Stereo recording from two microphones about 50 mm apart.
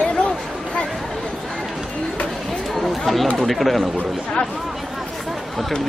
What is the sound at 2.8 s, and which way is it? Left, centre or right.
Chatter, centre.